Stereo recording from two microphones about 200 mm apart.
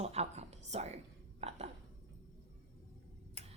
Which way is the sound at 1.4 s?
30° right (ahead or behind).